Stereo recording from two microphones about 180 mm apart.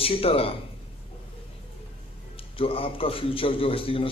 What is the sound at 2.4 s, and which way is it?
A man's voice, 30° left (ahead or behind).